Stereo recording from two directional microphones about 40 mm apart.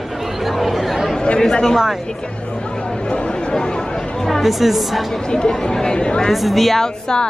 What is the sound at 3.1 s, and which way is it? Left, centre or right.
A woman's voice, left.